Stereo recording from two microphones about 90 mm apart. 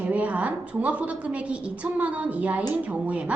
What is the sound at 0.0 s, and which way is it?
A woman's voice, 15° right (ahead or behind).